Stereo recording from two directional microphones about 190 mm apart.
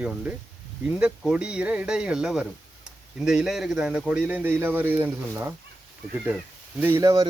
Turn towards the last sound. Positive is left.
turn(degrees=-20)  # may be behind; listen again after turning